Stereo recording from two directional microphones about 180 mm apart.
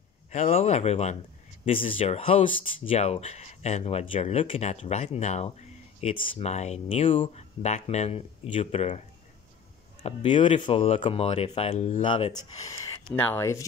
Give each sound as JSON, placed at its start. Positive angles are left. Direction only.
{"t": 0.3, "sound": "speech", "side_deg": 40}
{"t": 10.0, "sound": "speech", "side_deg": 30}